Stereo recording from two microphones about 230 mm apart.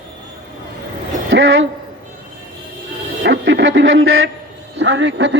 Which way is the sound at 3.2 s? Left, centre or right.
Right.